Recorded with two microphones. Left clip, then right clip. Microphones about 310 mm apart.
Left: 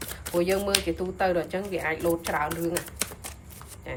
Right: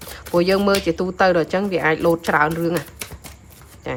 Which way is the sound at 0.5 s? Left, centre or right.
Right.